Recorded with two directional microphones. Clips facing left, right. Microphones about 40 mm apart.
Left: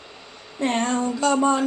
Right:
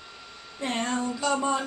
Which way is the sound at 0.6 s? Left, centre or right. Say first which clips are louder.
Left 6 dB; left.